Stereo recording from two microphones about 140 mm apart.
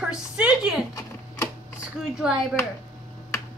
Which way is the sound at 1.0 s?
25° left (ahead or behind).